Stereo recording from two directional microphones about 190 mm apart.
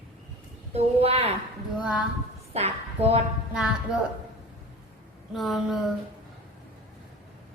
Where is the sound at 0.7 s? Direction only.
30° right (ahead or behind).